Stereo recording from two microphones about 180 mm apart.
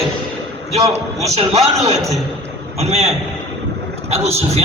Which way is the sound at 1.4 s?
35° right (ahead or behind).